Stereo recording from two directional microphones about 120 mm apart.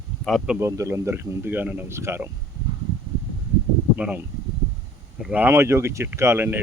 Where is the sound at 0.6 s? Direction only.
25° right (ahead or behind).